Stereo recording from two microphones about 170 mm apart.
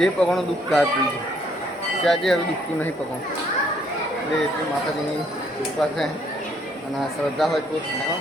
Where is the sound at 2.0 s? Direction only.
Centre (ahead or behind).